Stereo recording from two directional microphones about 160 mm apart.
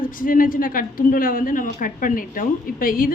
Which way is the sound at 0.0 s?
60° left (ahead or behind).